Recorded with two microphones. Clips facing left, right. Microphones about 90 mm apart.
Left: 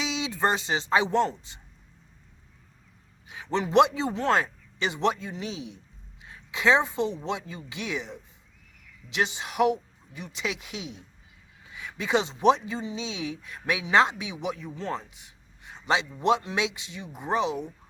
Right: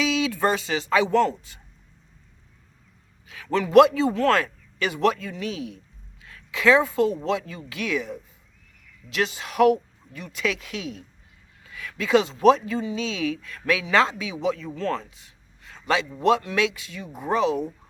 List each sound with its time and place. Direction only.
0.0 s speech: 25° left (ahead or behind)
3.2 s a woman's voice: 25° left (ahead or behind)
14.8 s a sound: 20° left (ahead or behind)
16.2 s speech: 25° left (ahead or behind)